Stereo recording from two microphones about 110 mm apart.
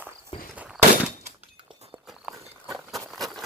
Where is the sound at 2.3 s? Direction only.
5° right (ahead or behind).